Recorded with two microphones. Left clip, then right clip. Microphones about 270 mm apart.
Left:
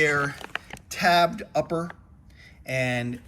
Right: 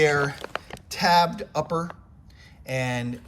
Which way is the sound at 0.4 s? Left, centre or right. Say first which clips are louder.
Right 1 dB; right.